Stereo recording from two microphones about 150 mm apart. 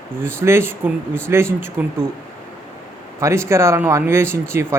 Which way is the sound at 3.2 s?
20° right (ahead or behind).